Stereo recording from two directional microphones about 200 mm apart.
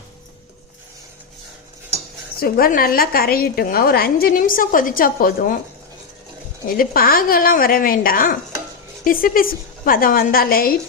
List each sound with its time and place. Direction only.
2.4 s a woman's voice: 45° left (ahead or behind)
6.7 s a woman's voice: 45° left (ahead or behind)